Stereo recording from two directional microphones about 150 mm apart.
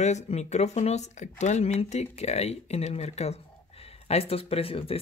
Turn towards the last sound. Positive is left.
turn(degrees=40)  # may be behind; listen again after turning